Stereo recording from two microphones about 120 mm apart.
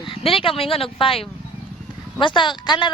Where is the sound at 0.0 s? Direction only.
50° left (ahead or behind).